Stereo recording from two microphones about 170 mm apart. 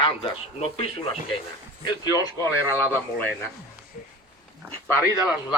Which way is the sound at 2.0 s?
20° left (ahead or behind).